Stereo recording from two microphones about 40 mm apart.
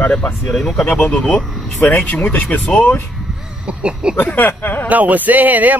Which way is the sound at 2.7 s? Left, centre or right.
Left.